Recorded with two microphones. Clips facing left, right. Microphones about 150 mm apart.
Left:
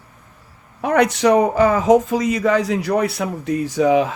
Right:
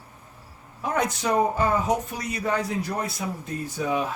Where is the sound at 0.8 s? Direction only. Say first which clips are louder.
Left 10 dB; 75° left (ahead or behind).